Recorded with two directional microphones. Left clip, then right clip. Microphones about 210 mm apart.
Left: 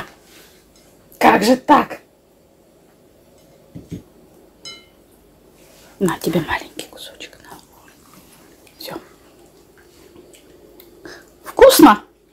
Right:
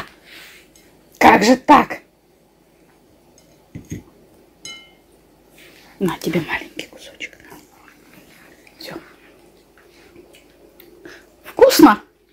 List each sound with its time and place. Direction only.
1.1 s speech: 20° right (ahead or behind)
5.9 s whispering: centre (ahead or behind)
8.7 s whispering: centre (ahead or behind)
11.0 s a sound: centre (ahead or behind)